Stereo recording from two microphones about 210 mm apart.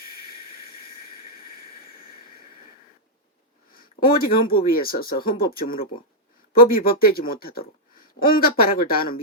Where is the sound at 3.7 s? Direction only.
45° left (ahead or behind).